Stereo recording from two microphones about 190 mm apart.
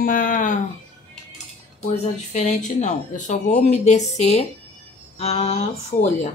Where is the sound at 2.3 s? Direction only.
40° left (ahead or behind).